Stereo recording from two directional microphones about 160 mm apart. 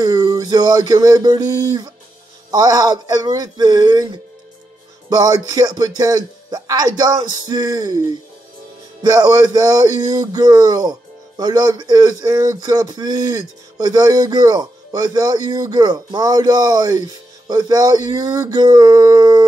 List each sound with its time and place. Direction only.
0.0 s speech: 25° right (ahead or behind)